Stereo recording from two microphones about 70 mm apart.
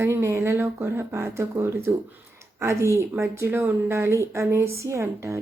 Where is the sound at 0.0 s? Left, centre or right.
Right.